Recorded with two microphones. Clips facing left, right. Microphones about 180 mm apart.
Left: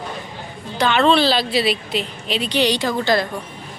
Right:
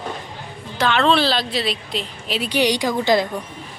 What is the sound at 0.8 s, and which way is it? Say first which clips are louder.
A woman's voice: left 2 dB; centre (ahead or behind).